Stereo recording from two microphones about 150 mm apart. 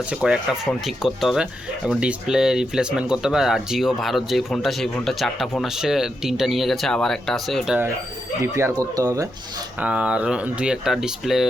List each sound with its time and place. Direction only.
0.1 s speech: 5° right (ahead or behind)
8.4 s speech: 20° right (ahead or behind)
9.8 s speech: 5° right (ahead or behind)